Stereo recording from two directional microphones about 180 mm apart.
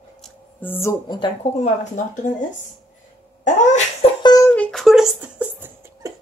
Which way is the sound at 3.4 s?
45° left (ahead or behind).